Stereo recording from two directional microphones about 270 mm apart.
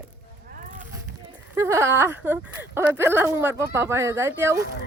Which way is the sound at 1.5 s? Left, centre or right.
Centre.